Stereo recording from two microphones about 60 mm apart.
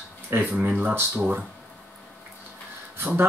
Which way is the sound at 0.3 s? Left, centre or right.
Right.